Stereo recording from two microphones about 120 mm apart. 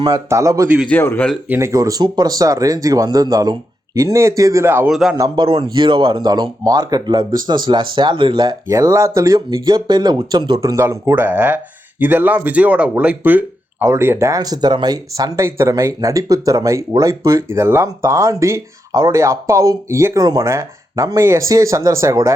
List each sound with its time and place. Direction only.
0.1 s speech: 25° right (ahead or behind)
0.9 s speech: 15° left (ahead or behind)
1.5 s speech: 20° right (ahead or behind)
4.9 s speech: 5° right (ahead or behind)
5.4 s speech: 45° right (ahead or behind)
10.6 s speech: 25° right (ahead or behind)